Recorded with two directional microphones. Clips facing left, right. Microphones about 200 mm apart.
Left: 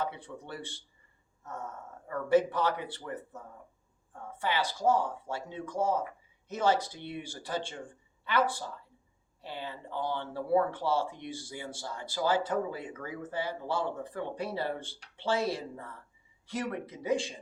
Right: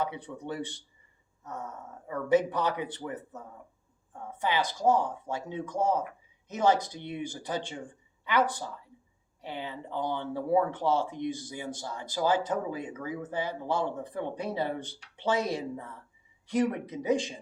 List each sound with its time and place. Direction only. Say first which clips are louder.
0.0 s speech: right 3 dB; 15° right (ahead or behind)
4.4 s speech: right 2 dB; 15° right (ahead or behind)